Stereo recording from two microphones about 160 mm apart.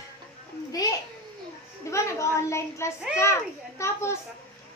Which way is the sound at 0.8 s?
25° left (ahead or behind).